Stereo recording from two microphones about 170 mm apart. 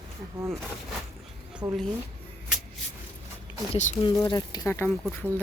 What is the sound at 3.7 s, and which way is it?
Speech, 45° left (ahead or behind).